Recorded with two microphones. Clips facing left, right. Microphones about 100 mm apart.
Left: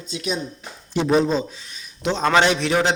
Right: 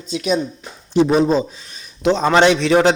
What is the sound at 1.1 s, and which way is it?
Speech, 15° right (ahead or behind).